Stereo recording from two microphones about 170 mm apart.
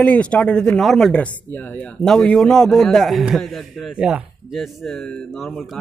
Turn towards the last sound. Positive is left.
turn(degrees=0)  # may be behind; listen again after turning